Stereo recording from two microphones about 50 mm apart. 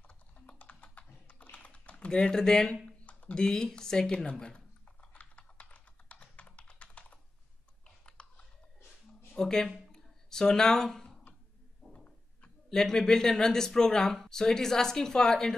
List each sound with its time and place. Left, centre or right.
0.5 s typing: left; by 2.7 s centre
3.3 s speech: centre
5.1 s computer keyboard: left
8.2 s biting: centre
9.3 s speech: centre
9.9 s a sound: centre
11.9 s a sound: left
12.6 s speech: centre